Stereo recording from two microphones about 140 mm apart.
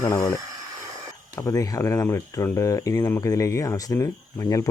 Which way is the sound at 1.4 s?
25° left (ahead or behind).